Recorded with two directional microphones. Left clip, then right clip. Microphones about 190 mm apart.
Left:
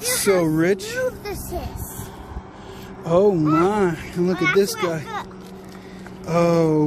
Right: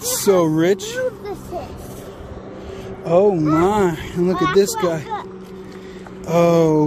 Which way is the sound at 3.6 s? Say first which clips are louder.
Right 3 dB; 10° right (ahead or behind).